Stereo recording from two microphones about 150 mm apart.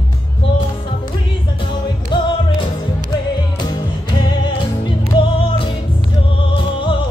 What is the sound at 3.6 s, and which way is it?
Music, 30° left (ahead or behind).